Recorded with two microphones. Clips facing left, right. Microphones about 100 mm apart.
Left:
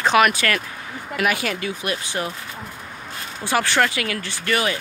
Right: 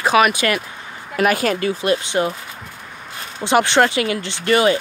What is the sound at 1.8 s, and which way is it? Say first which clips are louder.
Speech: right 8 dB; 25° right (ahead or behind).